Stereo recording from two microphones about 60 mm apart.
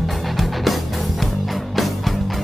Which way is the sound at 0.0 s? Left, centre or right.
Centre.